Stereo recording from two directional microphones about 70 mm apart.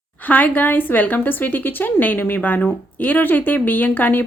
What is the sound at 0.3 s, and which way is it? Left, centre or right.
Speech, left.